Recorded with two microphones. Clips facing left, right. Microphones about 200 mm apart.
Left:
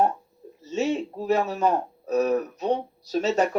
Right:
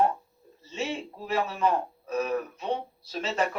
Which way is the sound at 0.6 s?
40° left (ahead or behind).